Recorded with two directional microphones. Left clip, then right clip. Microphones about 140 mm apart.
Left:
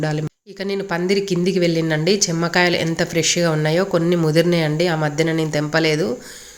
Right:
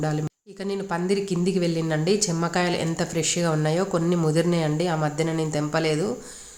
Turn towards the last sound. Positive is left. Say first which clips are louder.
# left 6 dB
turn(degrees=15)  # may be behind; listen again after turning